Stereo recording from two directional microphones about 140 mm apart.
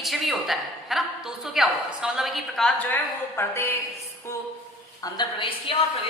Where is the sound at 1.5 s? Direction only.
5° right (ahead or behind).